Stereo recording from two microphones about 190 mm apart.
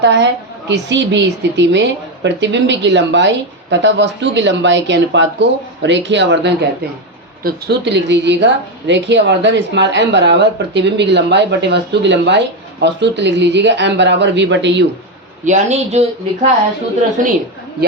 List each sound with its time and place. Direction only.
0.0 s speech: 65° right (ahead or behind)
15.4 s a man's voice: 40° right (ahead or behind)
17.2 s a woman's voice: 45° right (ahead or behind)